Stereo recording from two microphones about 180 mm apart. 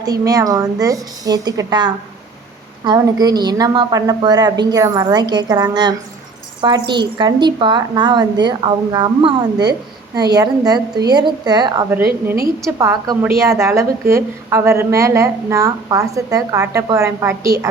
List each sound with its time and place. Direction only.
0.0 s a woman's voice: 20° right (ahead or behind)